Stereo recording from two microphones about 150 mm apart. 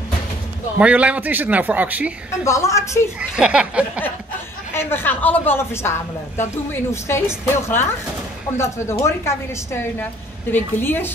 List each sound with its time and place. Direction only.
0.7 s a man's voice: 10° right (ahead or behind)
2.4 s a woman's voice: 20° left (ahead or behind)
3.2 s a man's voice: 5° right (ahead or behind)
4.7 s speech: 15° left (ahead or behind)